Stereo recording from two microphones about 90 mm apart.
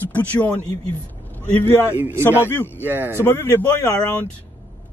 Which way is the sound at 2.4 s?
25° left (ahead or behind).